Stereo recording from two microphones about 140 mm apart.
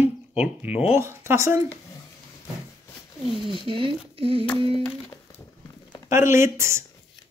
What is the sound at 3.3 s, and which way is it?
Speech, 35° right (ahead or behind).